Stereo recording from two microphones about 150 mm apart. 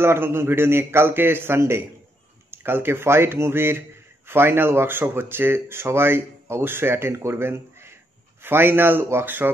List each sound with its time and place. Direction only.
0.0 s speech: 15° right (ahead or behind)